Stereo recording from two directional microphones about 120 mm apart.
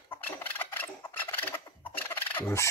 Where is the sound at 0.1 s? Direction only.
15° left (ahead or behind).